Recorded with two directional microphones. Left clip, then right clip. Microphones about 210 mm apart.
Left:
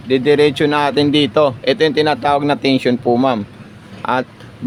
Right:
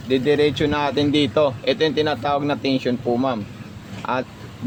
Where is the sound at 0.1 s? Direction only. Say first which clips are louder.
Left 6 dB; 20° left (ahead or behind).